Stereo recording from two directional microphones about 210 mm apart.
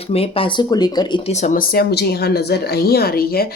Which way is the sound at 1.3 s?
35° left (ahead or behind).